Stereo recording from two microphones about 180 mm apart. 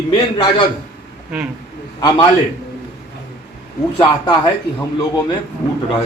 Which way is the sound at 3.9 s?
25° left (ahead or behind).